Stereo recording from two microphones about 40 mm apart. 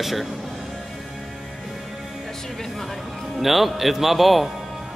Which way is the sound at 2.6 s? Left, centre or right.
Centre.